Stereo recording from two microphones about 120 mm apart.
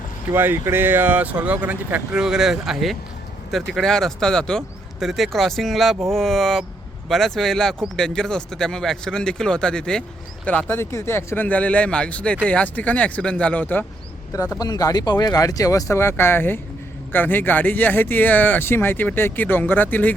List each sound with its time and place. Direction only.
0.3 s speech: 20° right (ahead or behind); by 13.8 s 15° left (ahead or behind)
14.3 s speech: 25° left (ahead or behind)